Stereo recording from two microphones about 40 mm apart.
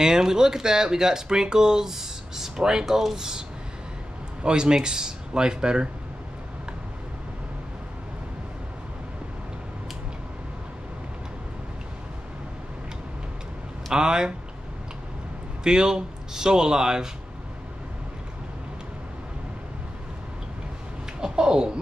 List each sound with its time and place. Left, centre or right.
0.0 s speech: centre
13.9 s speech: centre
15.6 s speech: centre
21.2 s a sound: right